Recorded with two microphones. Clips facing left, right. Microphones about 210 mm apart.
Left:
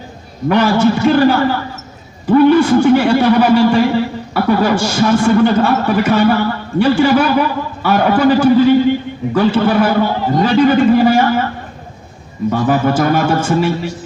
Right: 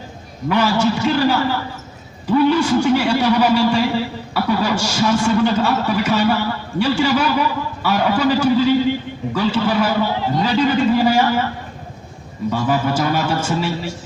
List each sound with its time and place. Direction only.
0.4 s a man's voice: 55° left (ahead or behind)